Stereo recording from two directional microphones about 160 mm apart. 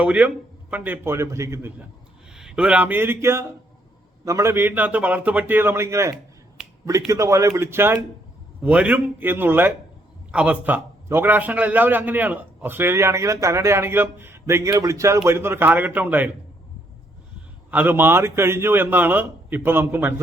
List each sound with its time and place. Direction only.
0.0 s a man's voice: 5° right (ahead or behind)
2.3 s a man's voice: 5° right (ahead or behind)
17.7 s a man's voice: 10° right (ahead or behind)